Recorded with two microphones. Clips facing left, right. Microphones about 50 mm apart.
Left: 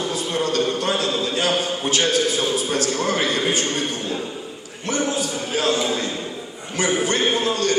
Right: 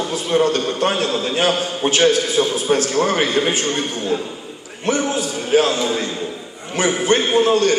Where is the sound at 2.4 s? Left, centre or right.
Right.